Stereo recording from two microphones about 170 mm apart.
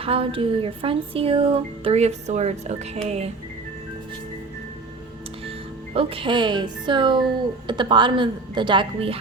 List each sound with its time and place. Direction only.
0.0 s speech: 35° right (ahead or behind)
5.9 s a woman's voice: 35° right (ahead or behind)